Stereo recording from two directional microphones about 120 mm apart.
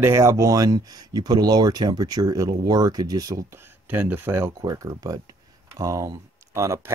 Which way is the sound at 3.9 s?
15° right (ahead or behind).